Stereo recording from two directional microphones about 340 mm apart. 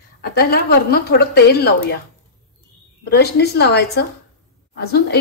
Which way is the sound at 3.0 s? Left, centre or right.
Left.